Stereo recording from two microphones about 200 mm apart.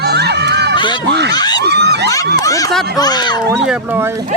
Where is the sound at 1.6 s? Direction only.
55° right (ahead or behind).